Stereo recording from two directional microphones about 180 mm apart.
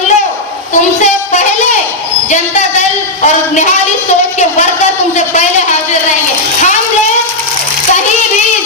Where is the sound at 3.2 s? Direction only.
40° left (ahead or behind).